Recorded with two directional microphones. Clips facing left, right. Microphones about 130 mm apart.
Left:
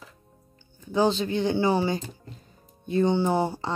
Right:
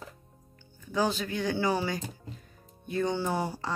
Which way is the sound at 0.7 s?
25° left (ahead or behind).